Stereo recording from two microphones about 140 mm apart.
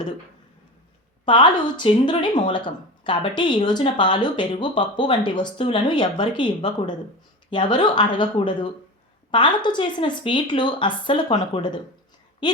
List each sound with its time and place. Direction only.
1.2 s a woman's voice: 35° left (ahead or behind)